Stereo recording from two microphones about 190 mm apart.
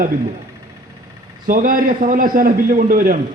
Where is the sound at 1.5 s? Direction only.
45° right (ahead or behind).